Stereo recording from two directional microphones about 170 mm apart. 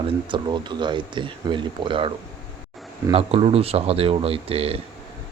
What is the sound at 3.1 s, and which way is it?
Speech, 35° right (ahead or behind).